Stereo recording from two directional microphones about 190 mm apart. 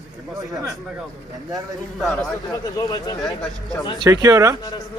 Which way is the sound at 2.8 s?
20° left (ahead or behind).